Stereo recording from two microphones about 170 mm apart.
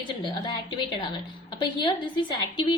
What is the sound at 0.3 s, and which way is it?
A woman's voice, 25° left (ahead or behind).